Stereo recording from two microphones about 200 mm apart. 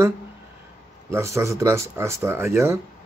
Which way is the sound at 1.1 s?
15° right (ahead or behind).